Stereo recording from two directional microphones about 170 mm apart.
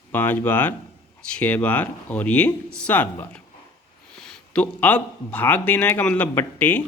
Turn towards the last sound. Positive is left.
turn(degrees=10)  # may be behind; listen again after turning